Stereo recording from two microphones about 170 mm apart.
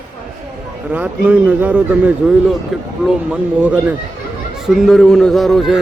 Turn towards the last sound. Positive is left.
turn(degrees=0)  # may be behind; listen again after turning